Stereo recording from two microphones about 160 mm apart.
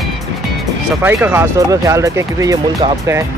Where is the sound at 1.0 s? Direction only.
15° right (ahead or behind).